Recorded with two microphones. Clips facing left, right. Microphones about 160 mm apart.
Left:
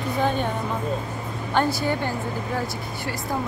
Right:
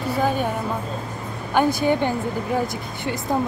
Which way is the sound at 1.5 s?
15° right (ahead or behind).